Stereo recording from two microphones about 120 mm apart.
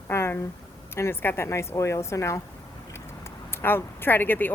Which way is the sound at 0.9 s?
20° left (ahead or behind).